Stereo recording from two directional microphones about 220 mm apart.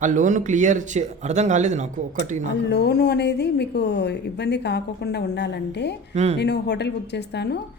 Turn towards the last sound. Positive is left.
turn(degrees=50)  # may be behind; listen again after turning